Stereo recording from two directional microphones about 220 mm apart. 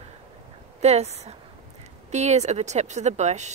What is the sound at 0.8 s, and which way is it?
Speech, 30° right (ahead or behind).